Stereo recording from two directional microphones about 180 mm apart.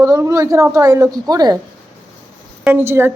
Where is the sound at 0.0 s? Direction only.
15° right (ahead or behind).